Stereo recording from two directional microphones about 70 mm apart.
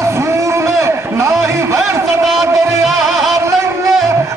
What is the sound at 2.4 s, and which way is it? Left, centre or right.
Music, right.